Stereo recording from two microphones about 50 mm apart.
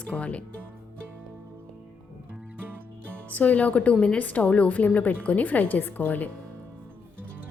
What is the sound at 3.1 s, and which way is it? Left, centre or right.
Speech, left.